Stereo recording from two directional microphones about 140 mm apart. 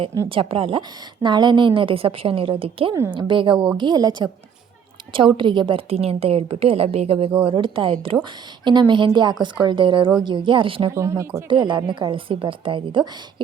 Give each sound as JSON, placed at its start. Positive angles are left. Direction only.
{"t": 0.3, "sound": "a woman's voice", "side_deg": -40}
{"t": 10.9, "sound": "speech", "side_deg": -20}
{"t": 11.4, "sound": "a woman's voice", "side_deg": -35}